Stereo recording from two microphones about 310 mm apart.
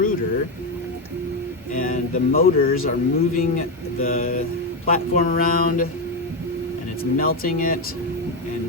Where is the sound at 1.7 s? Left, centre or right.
Left.